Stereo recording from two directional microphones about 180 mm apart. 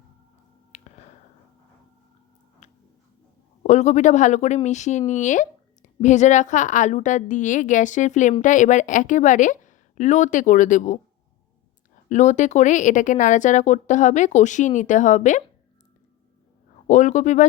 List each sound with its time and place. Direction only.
0.7 s a sound: 40° left (ahead or behind)
2.6 s tick-tock: 40° left (ahead or behind)
3.6 s speech: 40° left (ahead or behind)
12.0 s speech: 40° left (ahead or behind)
16.8 s a man's voice: 40° left (ahead or behind)